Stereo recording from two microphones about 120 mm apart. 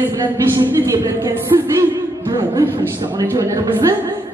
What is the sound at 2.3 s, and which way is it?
A woman's voice, 30° right (ahead or behind).